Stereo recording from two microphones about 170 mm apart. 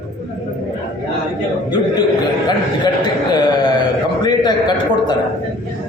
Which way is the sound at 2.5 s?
25° left (ahead or behind).